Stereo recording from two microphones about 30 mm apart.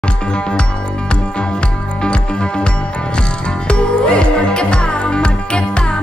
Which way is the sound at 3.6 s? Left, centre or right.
Left.